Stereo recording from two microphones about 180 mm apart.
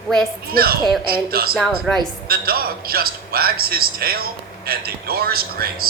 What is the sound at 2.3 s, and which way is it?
Speech, 55° right (ahead or behind).